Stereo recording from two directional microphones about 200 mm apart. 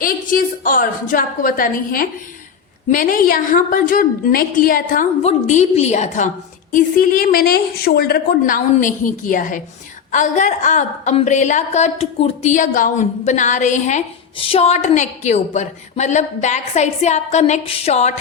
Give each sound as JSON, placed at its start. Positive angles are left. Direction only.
{"t": 0.0, "sound": "a woman's voice", "side_deg": 45}